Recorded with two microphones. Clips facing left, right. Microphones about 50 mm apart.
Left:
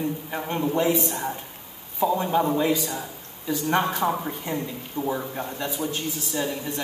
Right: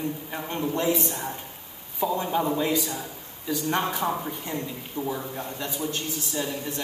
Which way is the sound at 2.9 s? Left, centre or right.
Centre.